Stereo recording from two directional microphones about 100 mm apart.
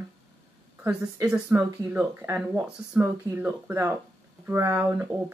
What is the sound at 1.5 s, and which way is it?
Speech, 15° right (ahead or behind).